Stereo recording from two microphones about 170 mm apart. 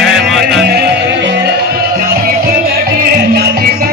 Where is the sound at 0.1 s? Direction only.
Centre (ahead or behind).